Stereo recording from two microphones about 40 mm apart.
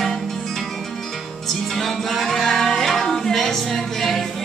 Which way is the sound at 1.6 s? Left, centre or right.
Centre.